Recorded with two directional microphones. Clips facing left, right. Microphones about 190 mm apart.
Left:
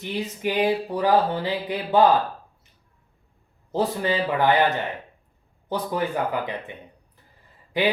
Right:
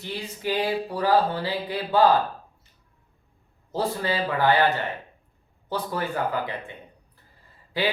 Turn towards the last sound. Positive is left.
turn(degrees=15)  # may be behind; listen again after turning